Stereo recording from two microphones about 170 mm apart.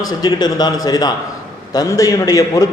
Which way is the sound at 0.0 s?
20° left (ahead or behind).